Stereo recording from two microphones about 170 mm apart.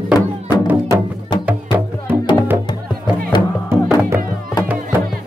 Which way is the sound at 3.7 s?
10° right (ahead or behind).